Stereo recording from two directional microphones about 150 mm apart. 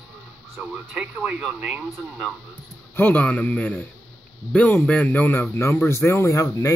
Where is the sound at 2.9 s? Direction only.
10° left (ahead or behind).